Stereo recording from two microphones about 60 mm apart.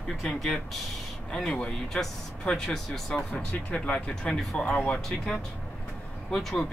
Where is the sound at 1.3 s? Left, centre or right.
Centre.